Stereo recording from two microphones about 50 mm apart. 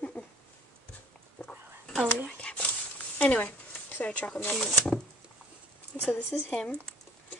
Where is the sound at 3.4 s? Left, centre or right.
Left.